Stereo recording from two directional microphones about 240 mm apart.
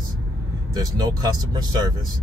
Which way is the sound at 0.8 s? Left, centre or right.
Centre.